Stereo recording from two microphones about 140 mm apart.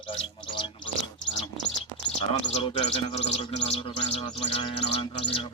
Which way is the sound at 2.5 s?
45° left (ahead or behind).